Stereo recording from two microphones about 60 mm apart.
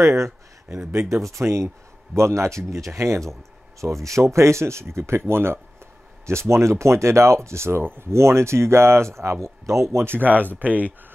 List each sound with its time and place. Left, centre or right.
0.0 s speech: right
9.9 s speech: right